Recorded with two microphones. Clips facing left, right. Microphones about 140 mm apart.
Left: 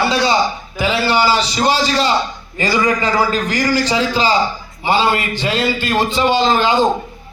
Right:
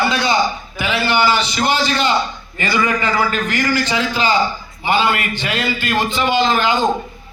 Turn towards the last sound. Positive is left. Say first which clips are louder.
# left 2 dB
turn(degrees=30)  # may be behind; listen again after turning